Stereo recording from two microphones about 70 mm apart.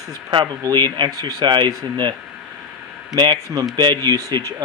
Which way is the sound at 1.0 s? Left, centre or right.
Right.